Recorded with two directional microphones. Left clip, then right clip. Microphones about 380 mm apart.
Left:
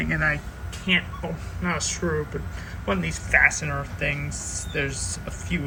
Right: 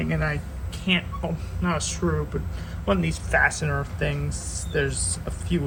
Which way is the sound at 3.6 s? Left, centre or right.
Right.